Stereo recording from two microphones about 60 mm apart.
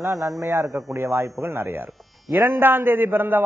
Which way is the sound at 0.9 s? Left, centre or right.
Right.